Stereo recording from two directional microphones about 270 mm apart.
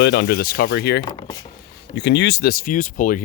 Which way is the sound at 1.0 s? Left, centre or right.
Centre.